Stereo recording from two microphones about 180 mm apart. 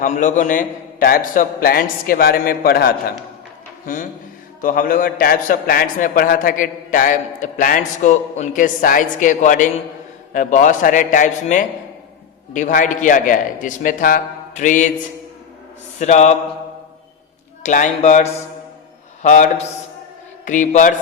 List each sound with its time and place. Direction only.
0.0 s a man's voice: 45° left (ahead or behind)
3.8 s a man's voice: 45° left (ahead or behind)
16.0 s mantra: 40° left (ahead or behind)
17.6 s a man's voice: 45° left (ahead or behind)